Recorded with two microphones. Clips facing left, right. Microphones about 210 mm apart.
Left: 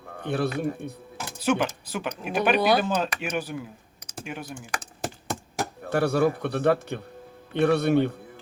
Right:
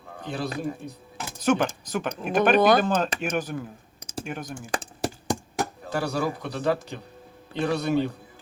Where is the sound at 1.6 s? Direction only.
45° right (ahead or behind).